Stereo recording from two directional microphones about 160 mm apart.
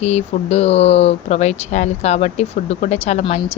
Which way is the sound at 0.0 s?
40° left (ahead or behind).